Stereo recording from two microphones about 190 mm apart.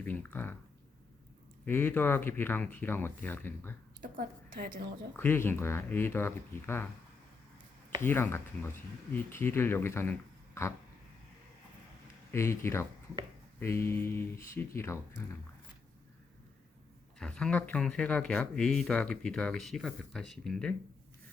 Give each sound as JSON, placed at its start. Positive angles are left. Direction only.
{"t": 0.0, "sound": "speech", "side_deg": 10}
{"t": 1.6, "sound": "speech", "side_deg": 10}
{"t": 4.0, "sound": "a woman's voice", "side_deg": -50}
{"t": 5.1, "sound": "speech", "side_deg": 10}
{"t": 8.0, "sound": "speech", "side_deg": 10}
{"t": 12.3, "sound": "speech", "side_deg": 15}
{"t": 17.2, "sound": "speech", "side_deg": 5}